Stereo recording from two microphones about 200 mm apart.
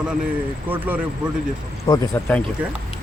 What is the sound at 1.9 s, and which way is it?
Speech, 20° left (ahead or behind).